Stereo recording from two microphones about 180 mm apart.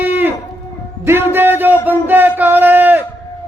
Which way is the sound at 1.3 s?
10° right (ahead or behind).